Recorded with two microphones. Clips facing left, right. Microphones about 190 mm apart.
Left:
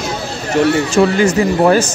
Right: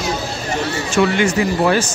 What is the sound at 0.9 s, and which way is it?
Speech, 40° left (ahead or behind).